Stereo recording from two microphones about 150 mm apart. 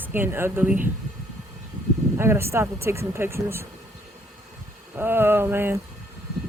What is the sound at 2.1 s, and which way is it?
Speech, 15° right (ahead or behind).